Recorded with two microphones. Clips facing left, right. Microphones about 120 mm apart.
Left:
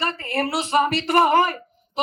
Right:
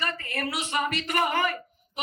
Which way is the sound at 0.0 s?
30° left (ahead or behind).